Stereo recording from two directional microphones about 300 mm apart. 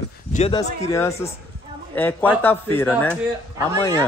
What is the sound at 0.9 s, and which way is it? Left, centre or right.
A man's voice, centre.